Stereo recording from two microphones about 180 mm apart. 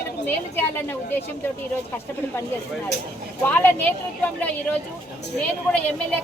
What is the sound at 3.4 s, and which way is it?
Speech, 10° left (ahead or behind).